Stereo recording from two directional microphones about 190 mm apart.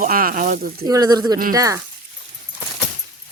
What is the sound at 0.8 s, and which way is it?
Speech, 20° right (ahead or behind).